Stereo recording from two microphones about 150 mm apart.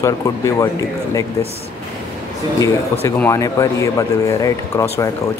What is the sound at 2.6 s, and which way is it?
Speech, 15° left (ahead or behind).